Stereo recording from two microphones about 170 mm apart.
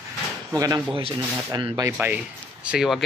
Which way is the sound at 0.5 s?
20° right (ahead or behind).